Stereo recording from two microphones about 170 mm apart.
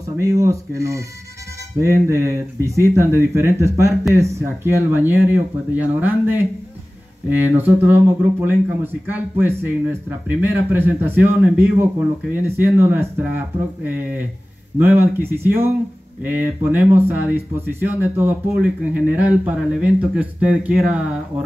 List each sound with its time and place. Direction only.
0.2 s speech: 20° right (ahead or behind)
14.8 s speech: 10° right (ahead or behind)